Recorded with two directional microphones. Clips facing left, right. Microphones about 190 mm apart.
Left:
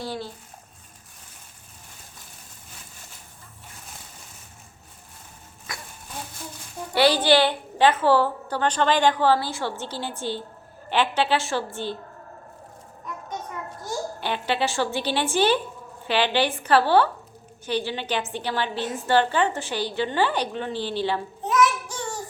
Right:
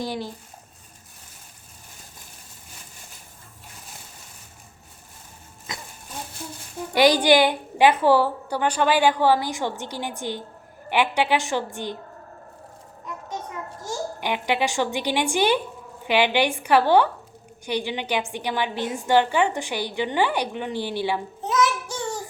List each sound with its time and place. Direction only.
0.0 s a woman's voice: 15° right (ahead or behind)
5.7 s a sound: 20° right (ahead or behind)
6.9 s a woman's voice: 15° right (ahead or behind)
14.2 s a woman's voice: 15° right (ahead or behind)